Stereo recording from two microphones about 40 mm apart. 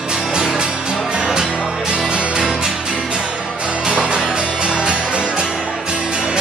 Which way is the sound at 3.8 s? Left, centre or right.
Right.